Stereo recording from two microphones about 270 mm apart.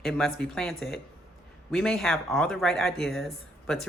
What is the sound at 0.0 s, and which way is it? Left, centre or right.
Speech, centre.